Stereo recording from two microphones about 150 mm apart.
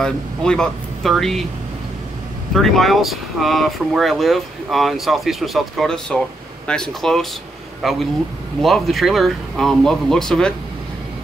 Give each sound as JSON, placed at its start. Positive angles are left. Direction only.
{"t": 0.0, "sound": "speech", "side_deg": 5}
{"t": 2.5, "sound": "speech", "side_deg": 0}